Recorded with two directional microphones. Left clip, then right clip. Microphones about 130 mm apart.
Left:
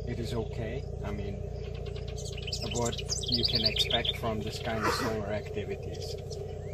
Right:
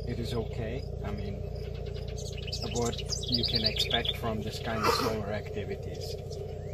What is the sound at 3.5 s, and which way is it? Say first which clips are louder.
Speech: left 1 dB; 30° left (ahead or behind).